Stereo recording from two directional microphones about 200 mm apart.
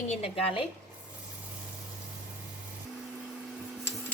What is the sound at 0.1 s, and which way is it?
Speech, 30° left (ahead or behind).